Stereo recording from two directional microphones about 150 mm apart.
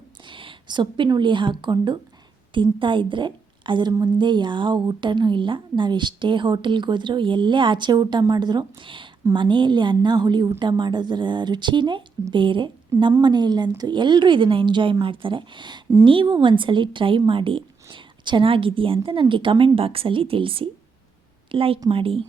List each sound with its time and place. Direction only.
0.3 s a woman's voice: 35° right (ahead or behind)